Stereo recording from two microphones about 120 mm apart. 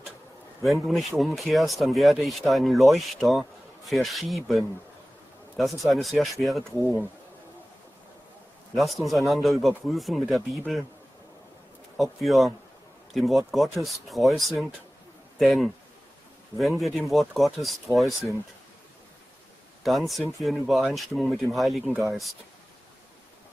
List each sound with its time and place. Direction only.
0.7 s speech: centre (ahead or behind)
6.6 s speech: 20° right (ahead or behind)
8.7 s speech: centre (ahead or behind)
12.0 s speech: centre (ahead or behind)
19.8 s speech: centre (ahead or behind)